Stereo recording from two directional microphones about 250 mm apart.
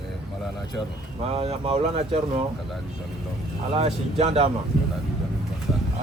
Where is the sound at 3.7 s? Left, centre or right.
Right.